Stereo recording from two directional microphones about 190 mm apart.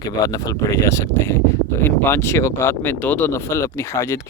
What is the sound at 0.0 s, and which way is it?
Speech, 20° left (ahead or behind).